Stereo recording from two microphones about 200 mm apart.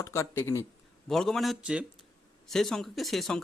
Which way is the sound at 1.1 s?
Centre (ahead or behind).